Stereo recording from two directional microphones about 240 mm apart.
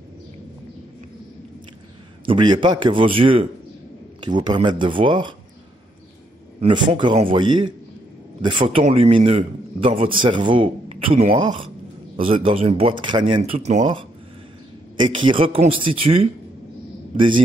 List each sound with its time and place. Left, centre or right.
2.2 s a man's voice: centre
6.6 s a man's voice: right